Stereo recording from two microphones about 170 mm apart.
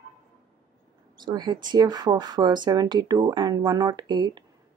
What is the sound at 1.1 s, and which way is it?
Speech, 25° right (ahead or behind).